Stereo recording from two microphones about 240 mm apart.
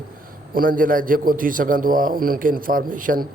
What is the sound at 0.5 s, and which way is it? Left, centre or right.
A man's voice, right.